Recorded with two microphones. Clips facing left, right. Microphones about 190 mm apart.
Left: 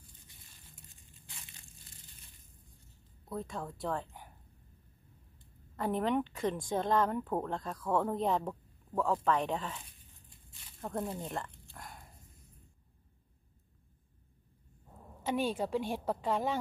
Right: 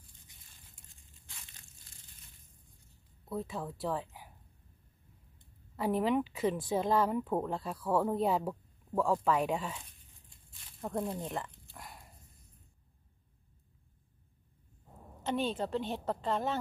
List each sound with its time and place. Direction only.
3.3 s speech: 5° right (ahead or behind)
5.8 s speech: 5° right (ahead or behind)
10.8 s a sound: centre (ahead or behind)
15.2 s a woman's voice: 10° left (ahead or behind)